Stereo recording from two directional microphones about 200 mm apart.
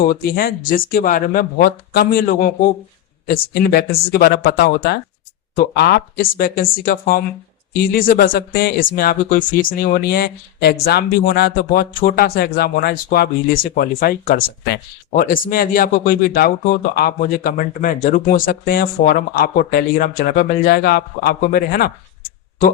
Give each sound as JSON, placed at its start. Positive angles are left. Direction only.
{"t": 0.0, "sound": "speech", "side_deg": 45}
{"t": 3.5, "sound": "speech", "side_deg": 50}